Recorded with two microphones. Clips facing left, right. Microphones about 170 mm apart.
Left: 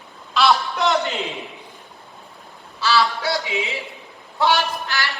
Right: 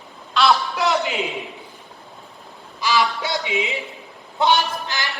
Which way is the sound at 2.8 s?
15° right (ahead or behind).